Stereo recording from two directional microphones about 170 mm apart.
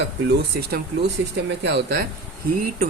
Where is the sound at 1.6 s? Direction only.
75° right (ahead or behind).